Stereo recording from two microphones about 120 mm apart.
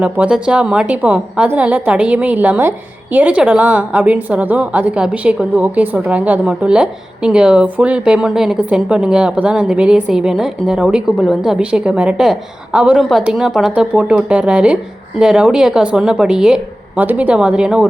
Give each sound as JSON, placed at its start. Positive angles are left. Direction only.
{"t": 0.0, "sound": "a woman's voice", "side_deg": -10}